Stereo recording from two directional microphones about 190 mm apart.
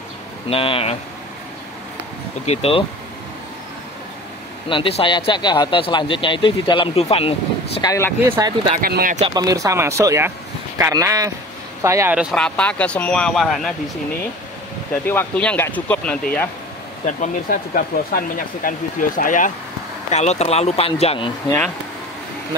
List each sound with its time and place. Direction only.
0.5 s speech: 30° left (ahead or behind)
2.4 s speech: 30° left (ahead or behind)
4.6 s speech: 30° left (ahead or behind)
7.8 s speech: 15° left (ahead or behind)
8.2 s speech: 15° right (ahead or behind)
8.8 s speech: 50° right (ahead or behind)
9.3 s speech: 20° right (ahead or behind); by 13.7 s centre (ahead or behind)
15.0 s speech: 10° left (ahead or behind)
17.2 s speech: 45° left (ahead or behind); by 21.3 s 30° left (ahead or behind)